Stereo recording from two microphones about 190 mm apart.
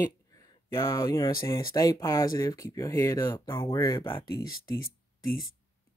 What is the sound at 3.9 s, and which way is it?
Speech, 25° left (ahead or behind).